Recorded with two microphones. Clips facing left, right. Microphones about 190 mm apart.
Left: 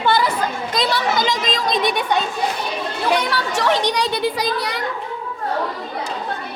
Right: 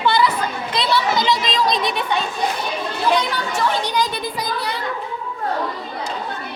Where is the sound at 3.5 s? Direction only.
75° left (ahead or behind).